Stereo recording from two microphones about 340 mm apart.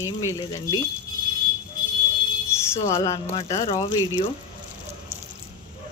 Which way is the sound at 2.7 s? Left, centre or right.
Centre.